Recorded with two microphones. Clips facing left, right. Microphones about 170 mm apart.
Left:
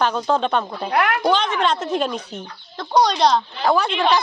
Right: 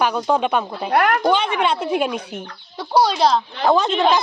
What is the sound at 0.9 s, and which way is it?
Speech, 45° right (ahead or behind).